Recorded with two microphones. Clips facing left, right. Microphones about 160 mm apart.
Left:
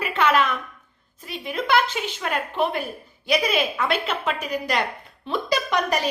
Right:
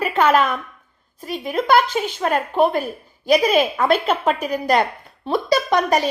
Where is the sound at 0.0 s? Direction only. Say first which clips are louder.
Right 4 dB; 45° right (ahead or behind).